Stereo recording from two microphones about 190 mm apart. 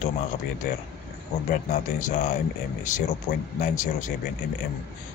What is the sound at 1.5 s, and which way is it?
Speech, 45° left (ahead or behind).